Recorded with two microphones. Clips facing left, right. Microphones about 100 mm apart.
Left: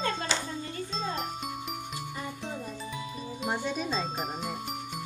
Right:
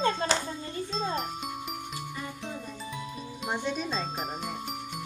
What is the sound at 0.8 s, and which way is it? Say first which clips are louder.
Music: right 3 dB; centre (ahead or behind).